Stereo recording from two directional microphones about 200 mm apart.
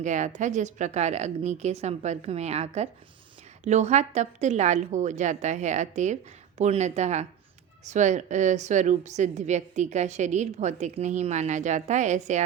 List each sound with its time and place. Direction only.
0.0 s a woman's voice: 35° right (ahead or behind)